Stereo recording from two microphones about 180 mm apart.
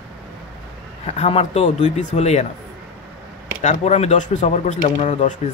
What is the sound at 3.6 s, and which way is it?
Speech, 40° left (ahead or behind).